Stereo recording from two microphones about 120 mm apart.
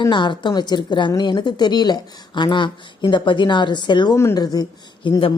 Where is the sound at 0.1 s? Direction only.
40° left (ahead or behind).